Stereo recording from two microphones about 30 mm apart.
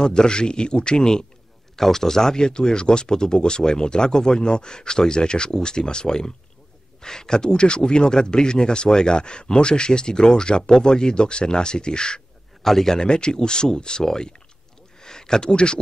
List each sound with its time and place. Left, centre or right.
0.0 s a man's voice: left
1.8 s speech: centre
2.4 s a man's voice: left
12.6 s speech: centre
13.0 s a man's voice: left
15.0 s a sound: left
15.5 s speech: left